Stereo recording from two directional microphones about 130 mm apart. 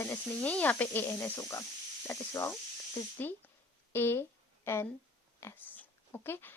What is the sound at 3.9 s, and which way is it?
A woman's voice, 15° left (ahead or behind).